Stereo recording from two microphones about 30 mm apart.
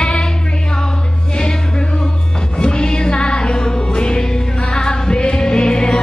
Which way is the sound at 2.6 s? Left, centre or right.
Left.